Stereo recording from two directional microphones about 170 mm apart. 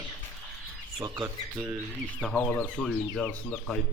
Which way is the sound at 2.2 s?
5° left (ahead or behind).